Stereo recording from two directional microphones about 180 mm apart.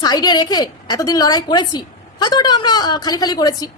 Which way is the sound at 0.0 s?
20° left (ahead or behind).